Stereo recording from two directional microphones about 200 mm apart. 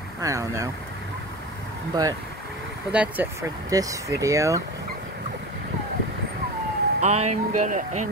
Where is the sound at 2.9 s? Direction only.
10° right (ahead or behind).